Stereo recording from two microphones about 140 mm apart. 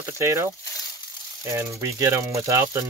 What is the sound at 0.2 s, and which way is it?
Speech, 20° right (ahead or behind).